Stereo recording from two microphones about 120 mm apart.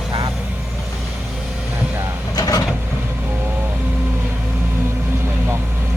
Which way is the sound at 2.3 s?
30° left (ahead or behind).